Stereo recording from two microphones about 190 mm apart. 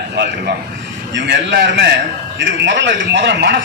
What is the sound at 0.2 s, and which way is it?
A man's voice, 70° right (ahead or behind).